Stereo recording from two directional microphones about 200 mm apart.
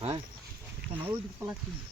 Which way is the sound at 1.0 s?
10° right (ahead or behind).